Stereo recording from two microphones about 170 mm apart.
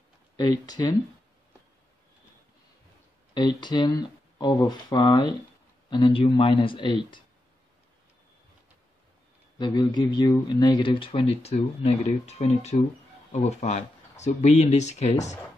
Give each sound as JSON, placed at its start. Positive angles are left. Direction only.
{"t": 0.4, "sound": "speech", "side_deg": 25}
{"t": 3.3, "sound": "speech", "side_deg": 25}
{"t": 9.6, "sound": "speech", "side_deg": 25}